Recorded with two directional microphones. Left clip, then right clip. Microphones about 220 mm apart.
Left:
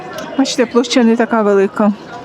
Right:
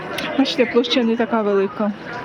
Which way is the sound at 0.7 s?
30° left (ahead or behind).